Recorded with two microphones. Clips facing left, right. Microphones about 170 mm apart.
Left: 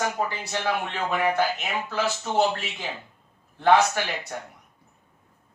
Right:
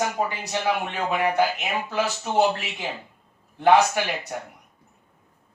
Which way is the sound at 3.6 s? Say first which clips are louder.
Right 2 dB; 15° right (ahead or behind).